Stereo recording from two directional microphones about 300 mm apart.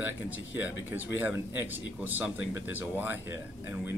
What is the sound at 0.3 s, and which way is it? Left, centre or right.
Speech, left.